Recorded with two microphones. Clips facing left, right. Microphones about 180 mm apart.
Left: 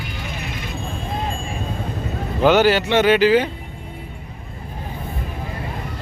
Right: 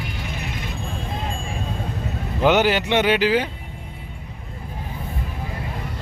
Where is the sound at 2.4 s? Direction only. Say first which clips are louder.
Left 3 dB; 15° right (ahead or behind).